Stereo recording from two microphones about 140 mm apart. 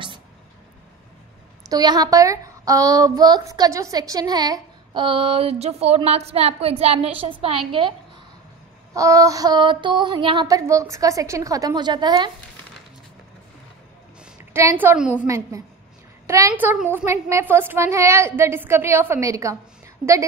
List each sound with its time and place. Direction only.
1.7 s a woman's voice: 30° right (ahead or behind)
8.9 s a woman's voice: 25° right (ahead or behind)
10.5 s a woman's voice: 20° right (ahead or behind)
14.2 s a sound: 15° right (ahead or behind)
15.2 s a woman's voice: 20° right (ahead or behind)